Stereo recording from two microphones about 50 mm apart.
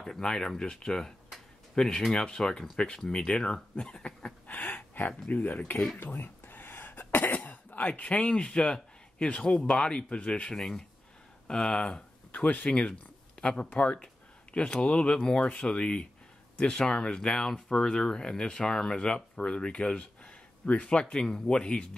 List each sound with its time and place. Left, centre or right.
0.0 s speech: centre
4.5 s a sound: left
5.3 s speech: left
6.0 s cough: left
7.3 s speech: left
10.5 s speech: centre
12.3 s speech: left